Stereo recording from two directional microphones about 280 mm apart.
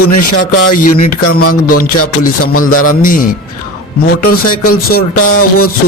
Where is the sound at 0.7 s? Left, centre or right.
Left.